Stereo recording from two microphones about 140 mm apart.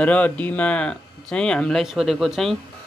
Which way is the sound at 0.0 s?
10° left (ahead or behind).